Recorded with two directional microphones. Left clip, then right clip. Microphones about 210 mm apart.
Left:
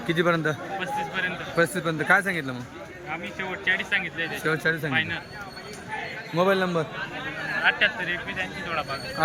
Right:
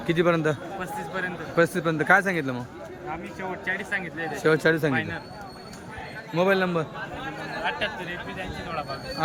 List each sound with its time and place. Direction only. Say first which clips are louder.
0.1 s speech: right 1 dB; 15° right (ahead or behind)
6.3 s speech: even; 10° right (ahead or behind)